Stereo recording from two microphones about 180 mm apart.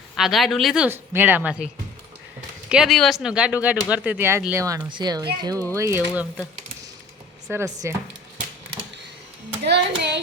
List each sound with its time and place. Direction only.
0.2 s speech: centre (ahead or behind)
2.6 s speech: centre (ahead or behind)
7.5 s speech: 15° right (ahead or behind)
9.6 s a child's voice: 70° right (ahead or behind)